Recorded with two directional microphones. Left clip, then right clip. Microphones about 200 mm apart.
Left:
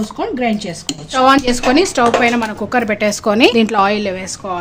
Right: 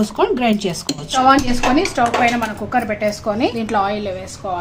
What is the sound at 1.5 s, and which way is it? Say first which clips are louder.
Speech: left 4 dB; 60° left (ahead or behind).